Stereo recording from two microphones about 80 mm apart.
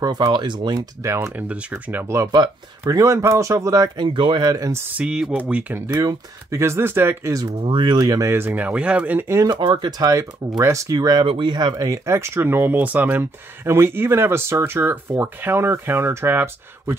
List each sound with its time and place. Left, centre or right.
0.0 s speech: right
0.7 s speech: right
1.3 s speech: right
2.8 s speech: right
4.0 s speech: right
4.5 s speech: right
4.9 s speech: centre
6.5 s speech: right
7.6 s speech: right
8.3 s speech: right
9.5 s speech: right
10.6 s speech: right
11.0 s speech: right
11.7 s speech: right